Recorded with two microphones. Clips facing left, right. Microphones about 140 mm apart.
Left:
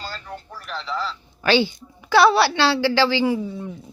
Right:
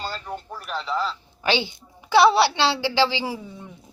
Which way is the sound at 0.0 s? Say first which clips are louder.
Right 3 dB; 20° right (ahead or behind).